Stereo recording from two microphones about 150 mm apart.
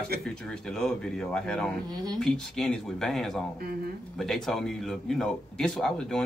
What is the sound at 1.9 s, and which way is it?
Speech, 25° right (ahead or behind).